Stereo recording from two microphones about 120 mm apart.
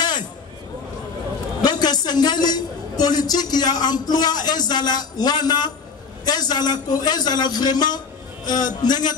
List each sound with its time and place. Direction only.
1.6 s a woman's voice: 35° left (ahead or behind)